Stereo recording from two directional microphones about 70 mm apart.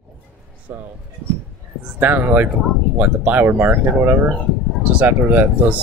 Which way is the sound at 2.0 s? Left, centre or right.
Right.